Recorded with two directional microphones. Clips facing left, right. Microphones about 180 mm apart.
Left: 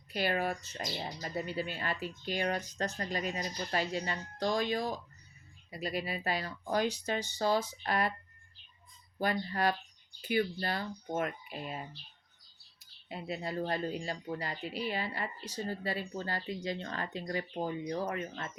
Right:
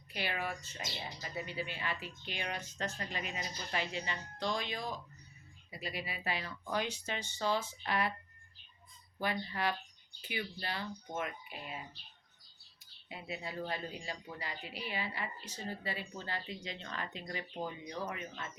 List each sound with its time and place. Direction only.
0.1 s speech: 45° left (ahead or behind)
9.1 s speech: 45° left (ahead or behind)
13.1 s speech: 45° left (ahead or behind)